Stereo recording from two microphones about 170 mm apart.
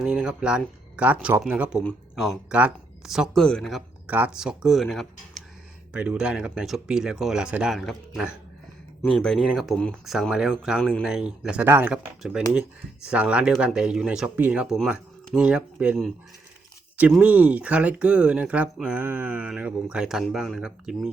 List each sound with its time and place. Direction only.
0.0 s speech: 5° right (ahead or behind)
1.8 s speech: 5° left (ahead or behind); by 11.9 s 10° right (ahead or behind)
13.1 s speech: 5° right (ahead or behind)